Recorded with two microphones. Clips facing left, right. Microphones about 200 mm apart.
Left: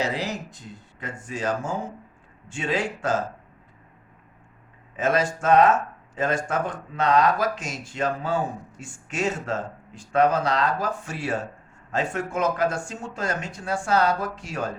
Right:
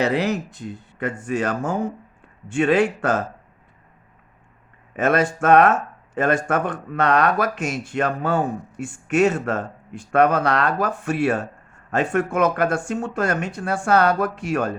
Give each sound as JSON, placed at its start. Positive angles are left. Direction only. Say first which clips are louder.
{"t": 0.0, "sound": "speech", "louder": "right 7 dB", "side_deg": -60}
{"t": 4.9, "sound": "speech", "louder": "right 4 dB", "side_deg": -60}